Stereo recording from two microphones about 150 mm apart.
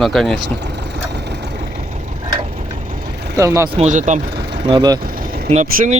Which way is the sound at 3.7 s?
50° right (ahead or behind).